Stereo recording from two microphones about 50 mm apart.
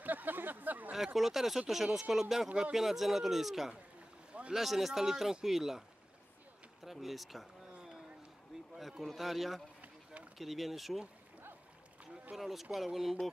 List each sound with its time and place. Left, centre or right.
0.0 s a sound: right
0.9 s speech: centre
4.3 s boat: right
4.6 s speech: centre
9.0 s speech: centre
12.4 s speech: centre